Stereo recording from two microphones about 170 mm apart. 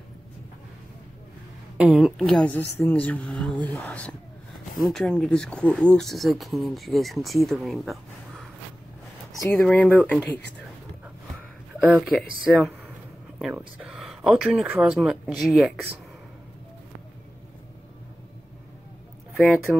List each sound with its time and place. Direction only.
1.8 s speech: 5° right (ahead or behind)
9.6 s speech: 5° left (ahead or behind)
11.8 s speech: 5° right (ahead or behind)
19.3 s speech: centre (ahead or behind)